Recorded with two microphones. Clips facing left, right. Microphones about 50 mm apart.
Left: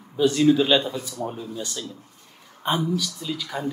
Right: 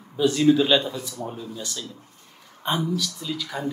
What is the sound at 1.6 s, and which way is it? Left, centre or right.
Speech, left.